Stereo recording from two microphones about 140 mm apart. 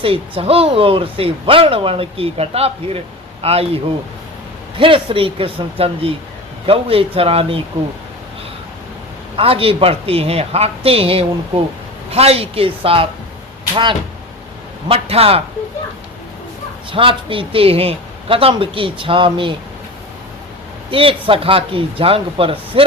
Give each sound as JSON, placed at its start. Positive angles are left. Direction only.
{"t": 0.0, "sound": "speech", "side_deg": -40}
{"t": 4.8, "sound": "speech", "side_deg": -40}
{"t": 9.3, "sound": "speech", "side_deg": -40}
{"t": 14.8, "sound": "speech", "side_deg": -45}
{"t": 16.9, "sound": "speech", "side_deg": -40}
{"t": 20.9, "sound": "speech", "side_deg": -40}